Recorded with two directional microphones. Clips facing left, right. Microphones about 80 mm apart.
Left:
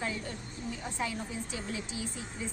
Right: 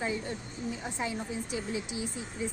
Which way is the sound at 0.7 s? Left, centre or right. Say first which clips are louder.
Right 1 dB; centre.